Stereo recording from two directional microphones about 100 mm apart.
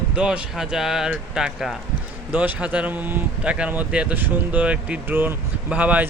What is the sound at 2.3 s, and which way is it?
Speech, 15° right (ahead or behind).